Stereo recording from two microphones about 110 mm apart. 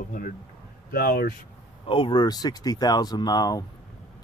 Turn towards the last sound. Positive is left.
turn(degrees=35)  # may be behind; listen again after turning